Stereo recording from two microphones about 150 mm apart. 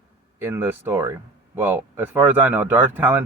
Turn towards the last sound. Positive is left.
turn(degrees=-15)  # may be behind; listen again after turning